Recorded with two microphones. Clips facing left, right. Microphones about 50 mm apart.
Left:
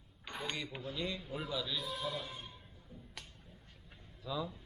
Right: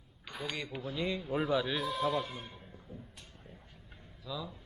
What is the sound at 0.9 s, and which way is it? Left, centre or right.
Speech, right.